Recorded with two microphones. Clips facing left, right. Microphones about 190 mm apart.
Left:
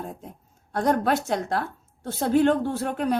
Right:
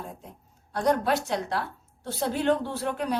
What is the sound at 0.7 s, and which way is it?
A woman's voice, 50° left (ahead or behind).